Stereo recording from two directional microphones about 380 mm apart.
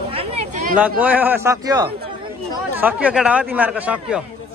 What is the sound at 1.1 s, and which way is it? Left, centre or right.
Speech, centre.